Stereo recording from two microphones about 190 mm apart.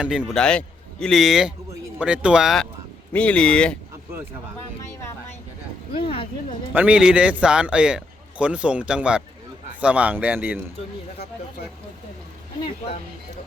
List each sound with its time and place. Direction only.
0.0 s a man's voice: 5° right (ahead or behind)
5.9 s speech: 30° left (ahead or behind)
6.7 s a man's voice: 5° right (ahead or behind)